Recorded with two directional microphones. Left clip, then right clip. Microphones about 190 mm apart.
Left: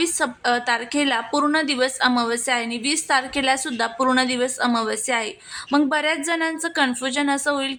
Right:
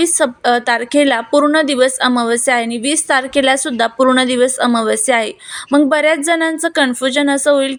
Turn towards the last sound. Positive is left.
turn(degrees=-20)  # may be behind; listen again after turning